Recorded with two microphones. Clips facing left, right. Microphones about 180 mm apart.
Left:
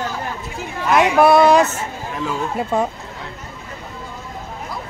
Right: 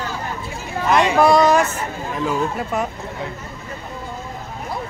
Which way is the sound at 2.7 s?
30° left (ahead or behind).